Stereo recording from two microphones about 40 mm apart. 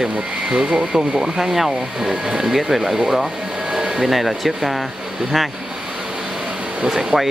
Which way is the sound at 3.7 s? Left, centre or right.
Centre.